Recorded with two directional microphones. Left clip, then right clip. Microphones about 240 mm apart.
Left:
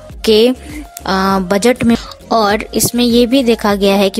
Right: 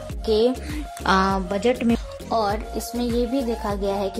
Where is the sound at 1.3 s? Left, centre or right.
Left.